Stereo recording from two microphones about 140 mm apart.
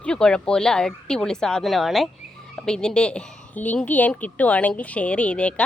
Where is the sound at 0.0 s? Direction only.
5° left (ahead or behind).